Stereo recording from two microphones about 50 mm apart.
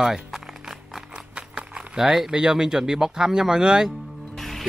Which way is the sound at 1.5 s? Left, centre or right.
Centre.